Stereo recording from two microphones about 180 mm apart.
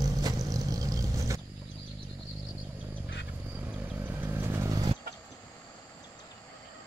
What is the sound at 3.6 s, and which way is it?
Vehicle, 10° right (ahead or behind).